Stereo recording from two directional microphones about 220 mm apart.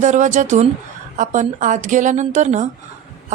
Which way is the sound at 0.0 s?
35° right (ahead or behind).